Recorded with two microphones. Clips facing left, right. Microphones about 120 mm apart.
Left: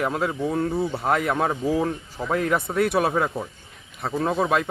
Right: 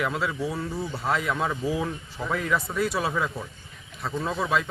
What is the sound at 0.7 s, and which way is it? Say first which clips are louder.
Speech: left 7 dB; 25° left (ahead or behind).